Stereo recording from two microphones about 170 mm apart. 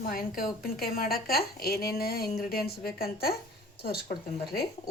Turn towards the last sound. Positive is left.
turn(degrees=65)  # may be behind; listen again after turning